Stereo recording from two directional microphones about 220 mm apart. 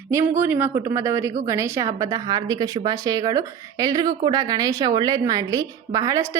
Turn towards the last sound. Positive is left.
turn(degrees=-15)  # may be behind; listen again after turning